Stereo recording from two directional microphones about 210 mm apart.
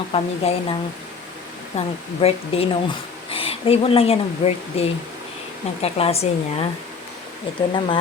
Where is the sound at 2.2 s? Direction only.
25° left (ahead or behind).